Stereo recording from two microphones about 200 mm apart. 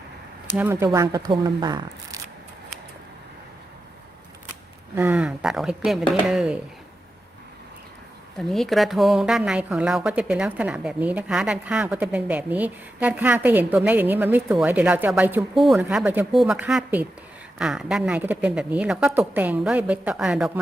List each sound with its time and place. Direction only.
0.5 s speech: 10° right (ahead or behind)
4.9 s a woman's voice: 10° right (ahead or behind)
8.4 s a woman's voice: centre (ahead or behind)